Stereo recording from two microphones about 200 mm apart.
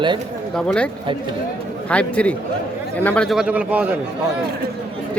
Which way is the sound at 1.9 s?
5° left (ahead or behind).